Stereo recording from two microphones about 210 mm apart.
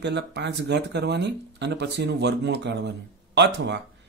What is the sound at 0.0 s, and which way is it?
Speech, 55° right (ahead or behind).